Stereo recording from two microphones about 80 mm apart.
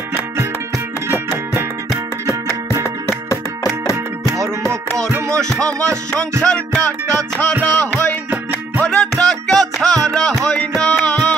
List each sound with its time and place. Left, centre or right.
2.8 s music: left
4.4 s music: centre